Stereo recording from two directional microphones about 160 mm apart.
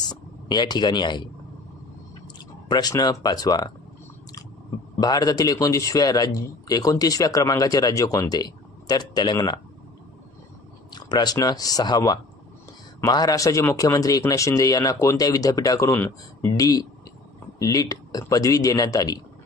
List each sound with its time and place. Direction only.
0.1 s speech: 25° left (ahead or behind)
2.7 s speech: 25° left (ahead or behind)
5.0 s speech: 25° left (ahead or behind)
11.0 s speech: 25° left (ahead or behind)